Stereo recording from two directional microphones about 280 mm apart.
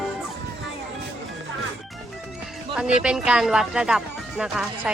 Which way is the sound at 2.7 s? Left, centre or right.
Centre.